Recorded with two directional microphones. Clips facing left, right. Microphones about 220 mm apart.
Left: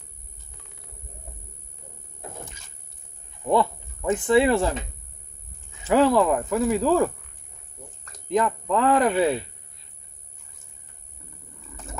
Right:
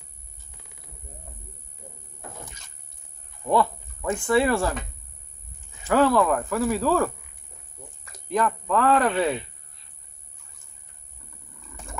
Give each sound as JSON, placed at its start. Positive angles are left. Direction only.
{"t": 3.4, "sound": "speech", "side_deg": 20}
{"t": 5.9, "sound": "speech", "side_deg": 20}
{"t": 8.3, "sound": "speech", "side_deg": 20}